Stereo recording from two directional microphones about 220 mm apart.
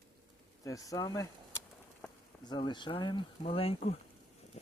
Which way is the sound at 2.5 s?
20° left (ahead or behind).